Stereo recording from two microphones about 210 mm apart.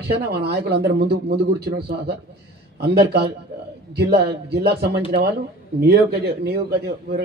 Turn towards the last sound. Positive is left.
turn(degrees=-50)  # may be behind; listen again after turning